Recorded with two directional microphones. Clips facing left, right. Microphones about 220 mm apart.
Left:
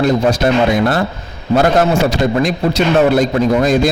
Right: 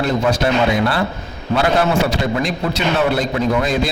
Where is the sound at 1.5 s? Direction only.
45° left (ahead or behind).